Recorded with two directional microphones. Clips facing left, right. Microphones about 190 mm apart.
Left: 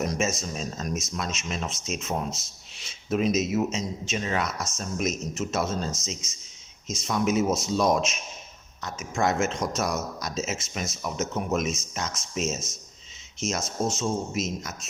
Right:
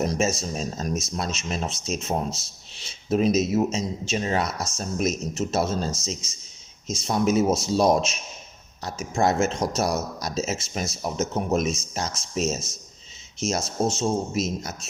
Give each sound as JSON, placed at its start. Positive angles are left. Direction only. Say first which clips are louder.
{"t": 0.0, "sound": "speech", "louder": "right 3 dB", "side_deg": -30}